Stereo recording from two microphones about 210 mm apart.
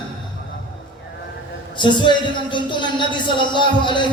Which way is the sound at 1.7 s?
20° left (ahead or behind).